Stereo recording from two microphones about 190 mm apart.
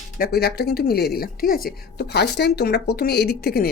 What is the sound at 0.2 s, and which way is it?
A woman's voice, 55° left (ahead or behind).